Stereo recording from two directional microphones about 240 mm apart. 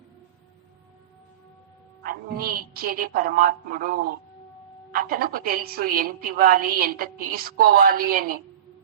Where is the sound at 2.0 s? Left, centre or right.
Right.